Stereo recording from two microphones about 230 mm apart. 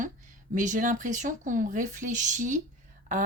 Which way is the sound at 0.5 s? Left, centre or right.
Right.